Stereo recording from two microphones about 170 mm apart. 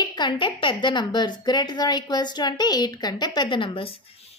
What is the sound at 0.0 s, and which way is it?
A woman's voice, 25° left (ahead or behind).